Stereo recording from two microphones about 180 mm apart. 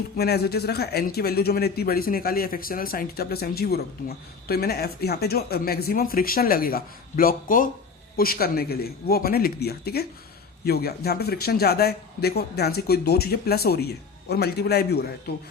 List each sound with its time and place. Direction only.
0.2 s speech: 60° left (ahead or behind)